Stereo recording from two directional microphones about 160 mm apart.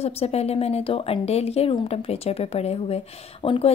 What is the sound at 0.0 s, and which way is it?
A woman's voice, 40° left (ahead or behind).